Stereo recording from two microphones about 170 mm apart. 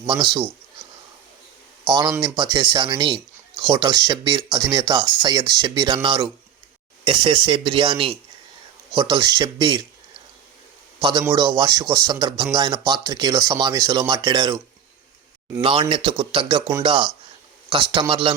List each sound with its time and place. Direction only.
0.0 s speech: 30° right (ahead or behind)
1.8 s speech: 25° right (ahead or behind)
11.3 s speech: 25° right (ahead or behind)
15.6 s a man's voice: 30° right (ahead or behind)